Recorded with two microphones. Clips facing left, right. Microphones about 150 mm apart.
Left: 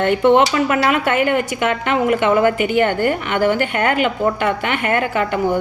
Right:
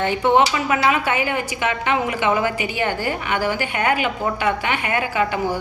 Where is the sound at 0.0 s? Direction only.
60° left (ahead or behind).